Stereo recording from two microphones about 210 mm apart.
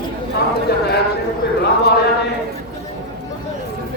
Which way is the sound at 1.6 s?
50° left (ahead or behind).